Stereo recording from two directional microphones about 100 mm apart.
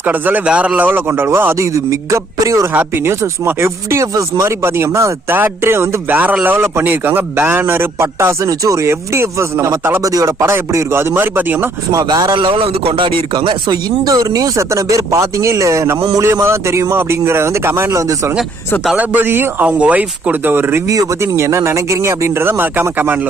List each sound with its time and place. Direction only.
0.0 s speech: 15° right (ahead or behind); by 2.6 s 35° right (ahead or behind)
2.7 s speech: 25° right (ahead or behind)
12.0 s speech: 45° right (ahead or behind); by 13.1 s 65° right (ahead or behind)
13.3 s speech: 50° right (ahead or behind); by 18.3 s 30° right (ahead or behind)
18.9 s speech: 20° right (ahead or behind)
20.8 s speech: 35° right (ahead or behind); by 23.3 s 20° right (ahead or behind)